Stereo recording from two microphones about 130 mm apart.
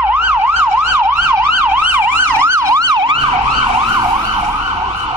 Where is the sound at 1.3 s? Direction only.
15° right (ahead or behind); by 3.1 s 30° right (ahead or behind).